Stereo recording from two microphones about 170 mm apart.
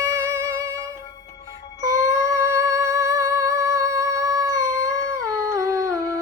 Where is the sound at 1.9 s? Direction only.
20° right (ahead or behind).